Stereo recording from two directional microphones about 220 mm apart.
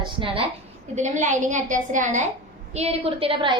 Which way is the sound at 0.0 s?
25° right (ahead or behind).